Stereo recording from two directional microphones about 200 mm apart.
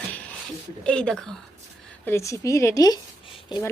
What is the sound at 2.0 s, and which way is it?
Speech, 15° left (ahead or behind).